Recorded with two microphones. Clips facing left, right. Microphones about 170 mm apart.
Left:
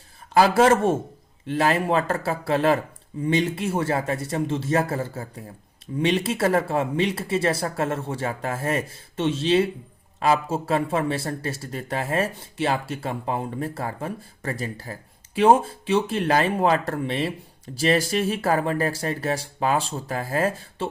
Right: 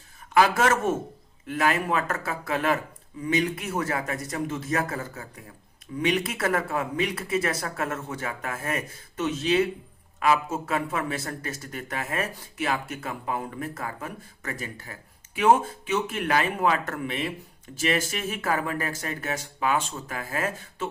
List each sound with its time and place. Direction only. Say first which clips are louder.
0.3 s a man's voice: left 4 dB; 35° left (ahead or behind)